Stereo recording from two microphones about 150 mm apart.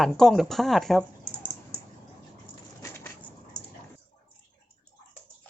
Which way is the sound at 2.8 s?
15° left (ahead or behind).